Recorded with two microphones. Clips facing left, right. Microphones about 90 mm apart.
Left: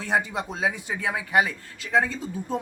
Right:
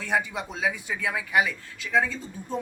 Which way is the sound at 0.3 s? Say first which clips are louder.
Left 2 dB; 50° left (ahead or behind).